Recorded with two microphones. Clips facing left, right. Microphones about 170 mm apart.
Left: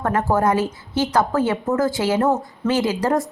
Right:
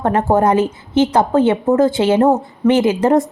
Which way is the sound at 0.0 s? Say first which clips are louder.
Right 5 dB; 25° right (ahead or behind).